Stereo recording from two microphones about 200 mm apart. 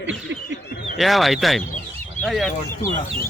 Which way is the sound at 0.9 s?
Centre (ahead or behind).